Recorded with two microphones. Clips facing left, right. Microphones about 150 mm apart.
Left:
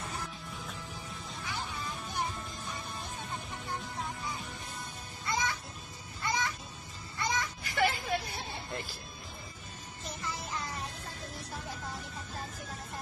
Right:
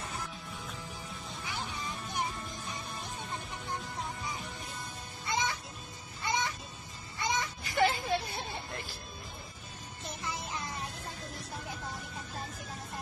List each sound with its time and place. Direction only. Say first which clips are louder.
5.2 s music: even; 20° right (ahead or behind)
10.2 s music: even; 20° right (ahead or behind)